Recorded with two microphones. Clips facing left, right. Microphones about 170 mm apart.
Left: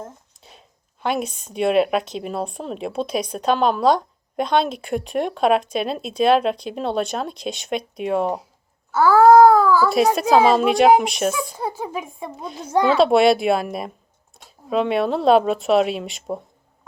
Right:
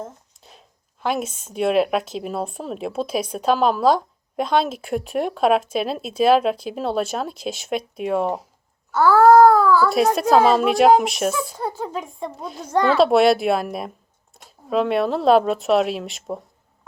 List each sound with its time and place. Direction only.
0.0 s a sound: centre (ahead or behind)
1.0 s speech: centre (ahead or behind)
8.9 s wail: 10° left (ahead or behind)
9.6 s baby cry: 10° left (ahead or behind)
10.0 s speech: centre (ahead or behind)
11.5 s speech: 10° left (ahead or behind)
12.4 s speech: centre (ahead or behind)
12.6 s speech: 10° left (ahead or behind)
12.9 s speech: centre (ahead or behind)
14.3 s a sound: centre (ahead or behind)
14.7 s speech: centre (ahead or behind)